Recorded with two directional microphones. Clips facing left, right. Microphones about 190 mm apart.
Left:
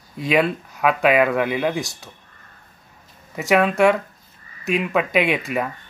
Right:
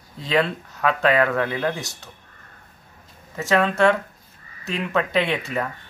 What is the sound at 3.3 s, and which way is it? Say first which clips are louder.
Speech: left 3 dB; 15° left (ahead or behind).